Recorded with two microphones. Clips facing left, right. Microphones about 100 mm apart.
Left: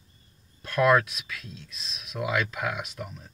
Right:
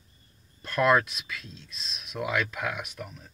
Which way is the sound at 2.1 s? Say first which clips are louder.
Left 1 dB; 5° left (ahead or behind).